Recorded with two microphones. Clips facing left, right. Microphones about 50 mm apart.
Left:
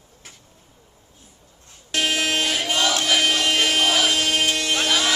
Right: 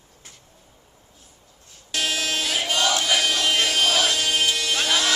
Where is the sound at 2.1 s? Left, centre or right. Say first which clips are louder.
Left 4 dB; left.